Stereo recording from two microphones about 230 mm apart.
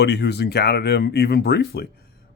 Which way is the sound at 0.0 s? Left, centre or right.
Left.